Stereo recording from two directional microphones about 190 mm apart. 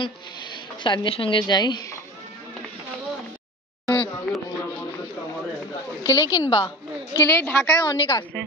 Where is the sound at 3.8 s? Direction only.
10° left (ahead or behind).